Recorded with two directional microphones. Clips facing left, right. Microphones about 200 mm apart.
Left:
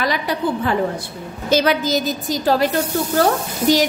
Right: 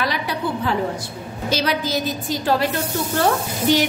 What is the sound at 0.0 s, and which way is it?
A woman's voice, 45° left (ahead or behind).